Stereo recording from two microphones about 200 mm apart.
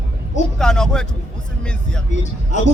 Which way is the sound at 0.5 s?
5° left (ahead or behind).